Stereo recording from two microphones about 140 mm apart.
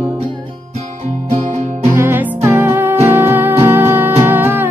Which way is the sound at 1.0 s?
55° right (ahead or behind).